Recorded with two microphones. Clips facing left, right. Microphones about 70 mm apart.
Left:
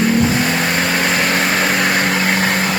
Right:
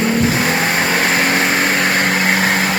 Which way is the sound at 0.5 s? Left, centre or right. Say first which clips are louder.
Right 1 dB; centre.